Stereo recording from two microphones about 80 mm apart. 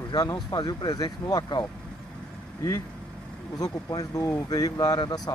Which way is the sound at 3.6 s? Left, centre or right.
Left.